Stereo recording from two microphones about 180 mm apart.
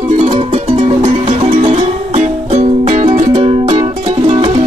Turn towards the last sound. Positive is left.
turn(degrees=-35)  # may be behind; listen again after turning